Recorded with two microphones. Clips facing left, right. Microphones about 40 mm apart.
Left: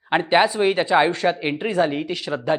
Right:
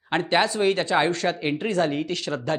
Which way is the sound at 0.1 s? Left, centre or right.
Centre.